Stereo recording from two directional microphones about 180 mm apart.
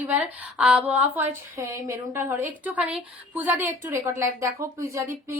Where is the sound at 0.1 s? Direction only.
10° right (ahead or behind).